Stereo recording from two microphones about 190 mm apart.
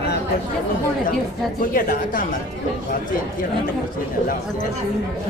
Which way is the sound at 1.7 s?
45° left (ahead or behind).